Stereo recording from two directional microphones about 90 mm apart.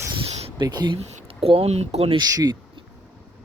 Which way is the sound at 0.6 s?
50° right (ahead or behind).